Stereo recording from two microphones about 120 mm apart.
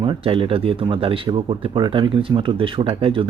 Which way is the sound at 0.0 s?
45° right (ahead or behind).